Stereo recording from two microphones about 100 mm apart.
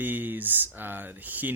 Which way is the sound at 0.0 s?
20° right (ahead or behind).